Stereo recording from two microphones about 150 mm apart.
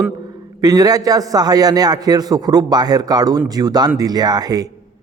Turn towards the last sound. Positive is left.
turn(degrees=-25)  # may be behind; listen again after turning